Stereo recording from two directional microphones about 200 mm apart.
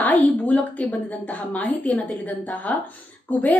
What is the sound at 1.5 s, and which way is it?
A woman's voice, 10° left (ahead or behind).